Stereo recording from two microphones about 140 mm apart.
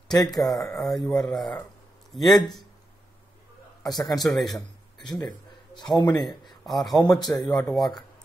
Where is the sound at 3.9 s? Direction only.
25° left (ahead or behind).